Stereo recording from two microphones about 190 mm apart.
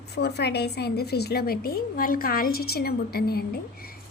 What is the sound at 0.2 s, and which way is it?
A woman's voice, 60° left (ahead or behind).